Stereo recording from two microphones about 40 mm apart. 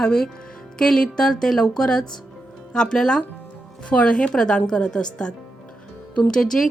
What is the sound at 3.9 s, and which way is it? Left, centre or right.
A woman's voice, left.